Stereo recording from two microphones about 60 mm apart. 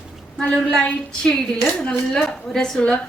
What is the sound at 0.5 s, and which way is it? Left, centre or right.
A woman's voice, centre.